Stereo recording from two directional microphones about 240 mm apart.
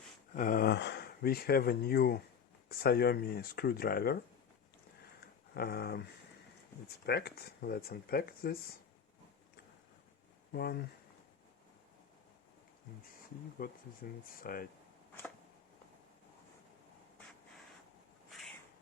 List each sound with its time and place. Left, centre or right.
0.3 s speech: left
5.2 s a sound: left
7.0 s speech: left
10.5 s speech: left
13.6 s speech: left
18.3 s cat: centre